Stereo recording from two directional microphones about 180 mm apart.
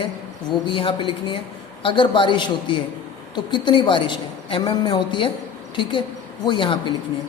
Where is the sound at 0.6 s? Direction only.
30° left (ahead or behind).